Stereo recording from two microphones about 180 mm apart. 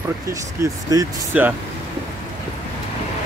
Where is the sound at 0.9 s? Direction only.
20° right (ahead or behind).